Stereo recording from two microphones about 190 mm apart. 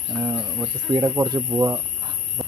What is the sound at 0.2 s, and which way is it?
Speech, 10° right (ahead or behind).